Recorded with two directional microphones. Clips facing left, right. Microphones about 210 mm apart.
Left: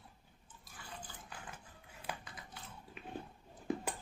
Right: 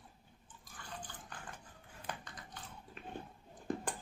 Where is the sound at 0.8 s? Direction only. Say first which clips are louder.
Right 2 dB; 5° left (ahead or behind).